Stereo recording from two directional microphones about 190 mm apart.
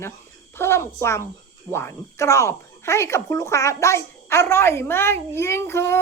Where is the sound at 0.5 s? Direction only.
15° left (ahead or behind).